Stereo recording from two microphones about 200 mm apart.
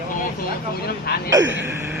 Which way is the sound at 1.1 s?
50° left (ahead or behind).